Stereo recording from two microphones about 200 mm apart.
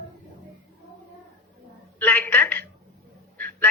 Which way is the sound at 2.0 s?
10° left (ahead or behind).